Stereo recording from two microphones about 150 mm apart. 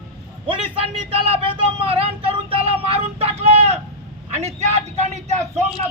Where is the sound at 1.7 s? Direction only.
40° right (ahead or behind).